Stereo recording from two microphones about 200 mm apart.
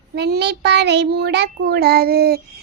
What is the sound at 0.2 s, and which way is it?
A child's voice, 55° right (ahead or behind).